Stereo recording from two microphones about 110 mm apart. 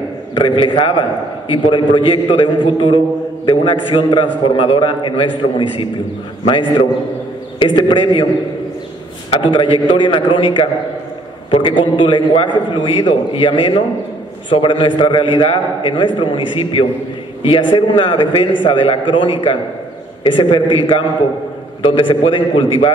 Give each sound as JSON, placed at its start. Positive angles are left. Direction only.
{"t": 0.3, "sound": "a man's voice", "side_deg": 45}
{"t": 9.3, "sound": "a man's voice", "side_deg": 50}
{"t": 21.8, "sound": "a man's voice", "side_deg": 50}